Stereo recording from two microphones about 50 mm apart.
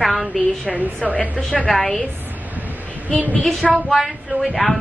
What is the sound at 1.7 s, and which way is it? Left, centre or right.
Speech, centre.